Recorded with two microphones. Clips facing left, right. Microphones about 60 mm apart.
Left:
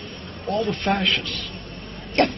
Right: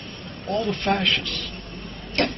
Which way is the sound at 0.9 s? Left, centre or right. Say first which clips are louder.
Right 1 dB; centre.